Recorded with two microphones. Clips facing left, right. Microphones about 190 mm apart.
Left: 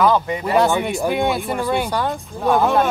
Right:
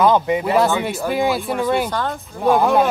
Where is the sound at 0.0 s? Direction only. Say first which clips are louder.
Right 2 dB; 20° right (ahead or behind).